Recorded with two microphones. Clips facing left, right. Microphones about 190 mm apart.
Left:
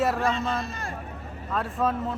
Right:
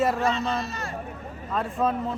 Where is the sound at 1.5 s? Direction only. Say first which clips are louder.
Right 1 dB; centre (ahead or behind).